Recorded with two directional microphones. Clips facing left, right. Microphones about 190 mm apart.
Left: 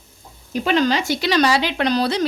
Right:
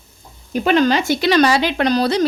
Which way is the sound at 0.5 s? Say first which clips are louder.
Right 3 dB; 55° right (ahead or behind).